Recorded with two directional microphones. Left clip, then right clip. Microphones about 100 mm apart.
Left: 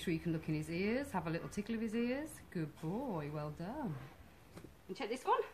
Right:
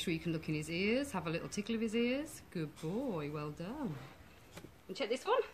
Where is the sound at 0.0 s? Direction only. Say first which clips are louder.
Right 1 dB; 15° left (ahead or behind).